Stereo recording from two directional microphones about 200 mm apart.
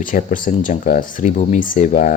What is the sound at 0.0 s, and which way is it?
Speech, 40° left (ahead or behind).